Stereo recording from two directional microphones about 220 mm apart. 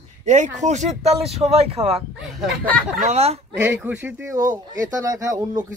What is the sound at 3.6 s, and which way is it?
A child's voice, 10° right (ahead or behind).